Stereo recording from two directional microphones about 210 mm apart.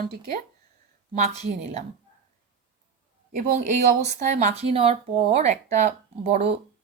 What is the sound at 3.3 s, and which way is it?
Speech, 35° right (ahead or behind).